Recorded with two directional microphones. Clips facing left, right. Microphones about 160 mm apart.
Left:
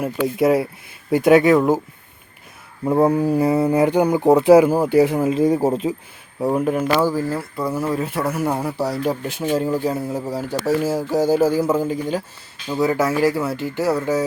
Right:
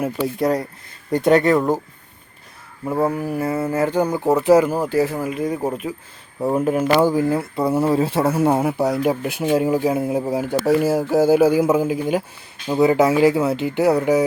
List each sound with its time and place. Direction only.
0.0 s speech: 5° left (ahead or behind)
2.8 s speech: 20° left (ahead or behind)
6.4 s speech: centre (ahead or behind)
7.0 s speech: 15° right (ahead or behind)
9.0 s speech: 10° right (ahead or behind)